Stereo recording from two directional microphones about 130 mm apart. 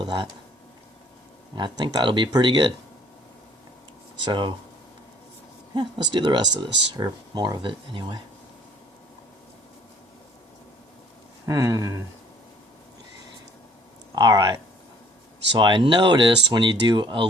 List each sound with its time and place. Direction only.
1.5 s speech: 35° right (ahead or behind)
4.3 s speech: 35° right (ahead or behind)
5.7 s speech: 35° right (ahead or behind)
11.4 s speech: 25° right (ahead or behind)
14.2 s speech: 30° right (ahead or behind)